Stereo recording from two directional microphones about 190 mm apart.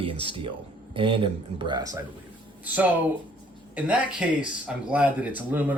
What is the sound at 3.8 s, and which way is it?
Speech, 5° right (ahead or behind).